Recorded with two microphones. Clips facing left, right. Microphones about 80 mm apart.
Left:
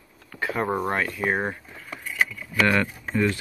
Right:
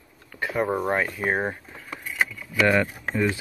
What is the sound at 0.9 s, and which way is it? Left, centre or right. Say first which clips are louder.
Speech: right 1 dB; centre.